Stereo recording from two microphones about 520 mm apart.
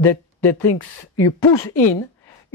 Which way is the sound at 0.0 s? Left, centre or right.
Left.